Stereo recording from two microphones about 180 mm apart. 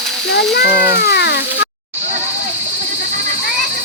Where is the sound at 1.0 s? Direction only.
65° left (ahead or behind).